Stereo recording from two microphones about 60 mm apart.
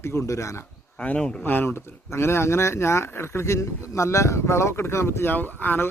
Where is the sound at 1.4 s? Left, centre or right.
Left.